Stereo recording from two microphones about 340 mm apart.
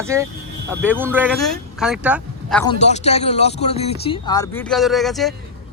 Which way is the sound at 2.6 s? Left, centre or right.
Centre.